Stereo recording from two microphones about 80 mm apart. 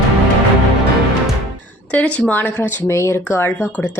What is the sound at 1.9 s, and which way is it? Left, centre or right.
A woman's voice, centre.